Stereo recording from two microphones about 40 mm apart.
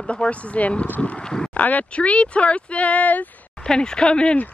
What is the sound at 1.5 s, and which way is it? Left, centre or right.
Speech, left.